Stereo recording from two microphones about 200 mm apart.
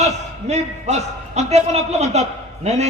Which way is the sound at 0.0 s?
35° right (ahead or behind).